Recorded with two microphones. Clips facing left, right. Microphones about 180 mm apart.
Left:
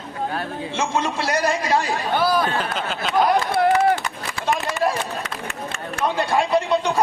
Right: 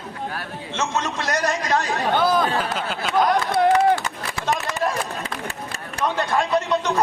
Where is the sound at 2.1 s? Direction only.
20° right (ahead or behind).